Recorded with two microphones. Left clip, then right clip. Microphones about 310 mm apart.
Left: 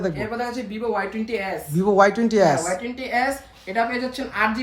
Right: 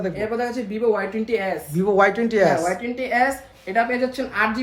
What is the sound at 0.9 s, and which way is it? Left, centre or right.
Speech, centre.